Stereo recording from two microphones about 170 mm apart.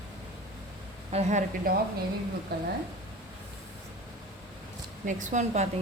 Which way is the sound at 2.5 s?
65° right (ahead or behind).